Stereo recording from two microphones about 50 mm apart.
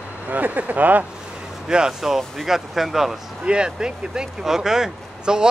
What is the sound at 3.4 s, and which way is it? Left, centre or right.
Speech, centre.